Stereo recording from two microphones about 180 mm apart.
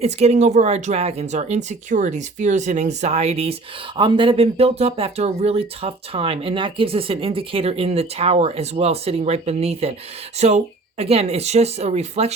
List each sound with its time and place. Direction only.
0.0 s speech: 35° right (ahead or behind)